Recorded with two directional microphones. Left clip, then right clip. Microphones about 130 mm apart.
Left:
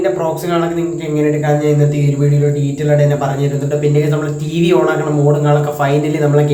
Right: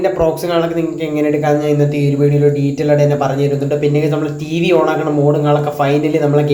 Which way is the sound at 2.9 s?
35° right (ahead or behind).